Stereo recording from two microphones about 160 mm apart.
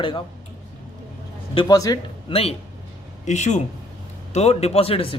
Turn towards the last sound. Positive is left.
turn(degrees=35)  # may be behind; listen again after turning